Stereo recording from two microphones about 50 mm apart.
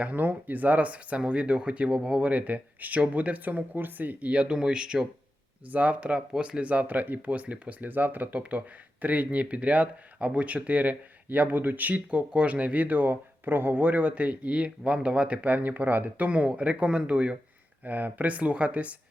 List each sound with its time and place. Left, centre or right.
0.0 s speech: right; by 5.0 s centre
5.7 s speech: right